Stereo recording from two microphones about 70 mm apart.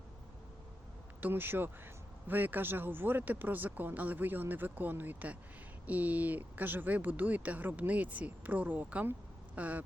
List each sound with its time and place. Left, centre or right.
1.2 s a man's voice: right